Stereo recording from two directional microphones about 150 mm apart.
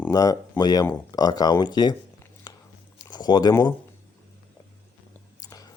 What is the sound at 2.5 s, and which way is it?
Biting, 25° left (ahead or behind).